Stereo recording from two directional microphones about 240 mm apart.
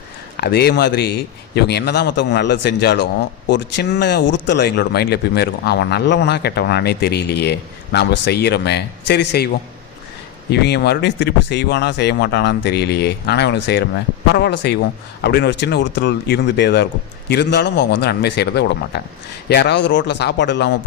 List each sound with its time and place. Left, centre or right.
0.3 s speech: left
10.5 s speech: left